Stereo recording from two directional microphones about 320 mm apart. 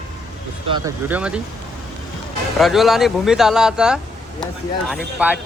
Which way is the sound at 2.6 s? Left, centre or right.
Centre.